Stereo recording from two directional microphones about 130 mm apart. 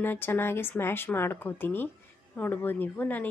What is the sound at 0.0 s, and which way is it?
Speech, 15° left (ahead or behind).